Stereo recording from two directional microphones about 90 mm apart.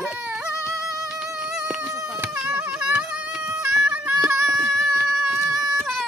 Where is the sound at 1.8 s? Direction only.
35° right (ahead or behind).